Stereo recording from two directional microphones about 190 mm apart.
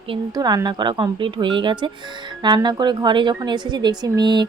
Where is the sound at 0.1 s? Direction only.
20° right (ahead or behind).